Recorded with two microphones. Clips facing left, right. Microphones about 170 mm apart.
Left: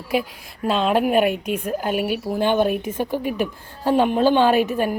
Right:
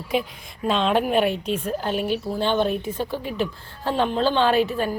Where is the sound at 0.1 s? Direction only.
5° left (ahead or behind).